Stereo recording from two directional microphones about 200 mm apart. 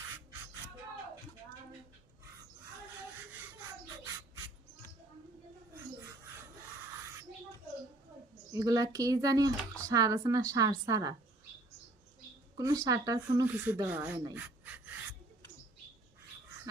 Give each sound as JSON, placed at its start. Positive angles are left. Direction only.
{"t": 8.5, "sound": "speech", "side_deg": -15}
{"t": 12.5, "sound": "speech", "side_deg": -15}
{"t": 14.3, "sound": "pant", "side_deg": -5}